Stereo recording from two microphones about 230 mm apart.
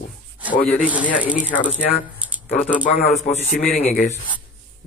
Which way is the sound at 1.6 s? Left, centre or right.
Centre.